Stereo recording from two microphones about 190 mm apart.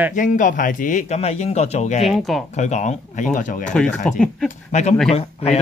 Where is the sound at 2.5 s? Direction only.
40° left (ahead or behind).